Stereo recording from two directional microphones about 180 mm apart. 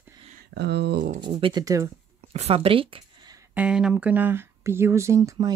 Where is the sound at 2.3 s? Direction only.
35° right (ahead or behind).